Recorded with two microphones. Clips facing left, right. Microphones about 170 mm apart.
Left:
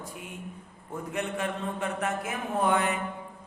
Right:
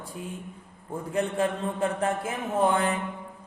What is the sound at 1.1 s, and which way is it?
Speech, 35° right (ahead or behind).